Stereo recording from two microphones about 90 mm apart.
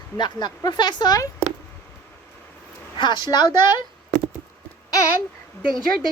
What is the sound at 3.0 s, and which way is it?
Speech, 55° left (ahead or behind).